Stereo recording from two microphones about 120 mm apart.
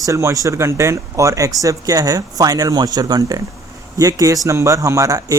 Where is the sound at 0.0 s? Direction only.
25° right (ahead or behind).